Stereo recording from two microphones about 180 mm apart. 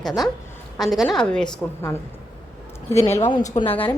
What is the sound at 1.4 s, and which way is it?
A woman's voice, 15° left (ahead or behind).